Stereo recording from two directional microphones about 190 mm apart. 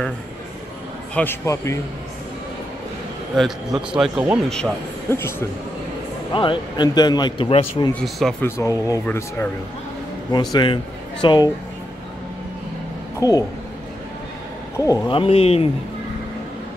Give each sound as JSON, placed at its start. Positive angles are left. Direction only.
{"t": 1.1, "sound": "a man's voice", "side_deg": 10}
{"t": 3.3, "sound": "a man's voice", "side_deg": 0}
{"t": 5.1, "sound": "a man's voice", "side_deg": 15}
{"t": 6.3, "sound": "a man's voice", "side_deg": 25}
{"t": 7.9, "sound": "a man's voice", "side_deg": 0}
{"t": 8.5, "sound": "a man's voice", "side_deg": 15}
{"t": 10.3, "sound": "speech", "side_deg": 20}
{"t": 13.2, "sound": "a man's voice", "side_deg": 20}
{"t": 14.9, "sound": "a man's voice", "side_deg": 20}